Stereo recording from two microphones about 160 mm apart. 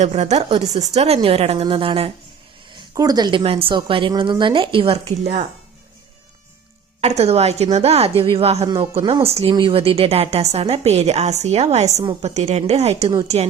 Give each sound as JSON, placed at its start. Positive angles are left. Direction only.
{"t": 0.0, "sound": "a woman's voice", "side_deg": -45}
{"t": 2.7, "sound": "a woman's voice", "side_deg": -25}
{"t": 7.0, "sound": "a woman's voice", "side_deg": -40}
{"t": 8.6, "sound": "a woman's voice", "side_deg": -30}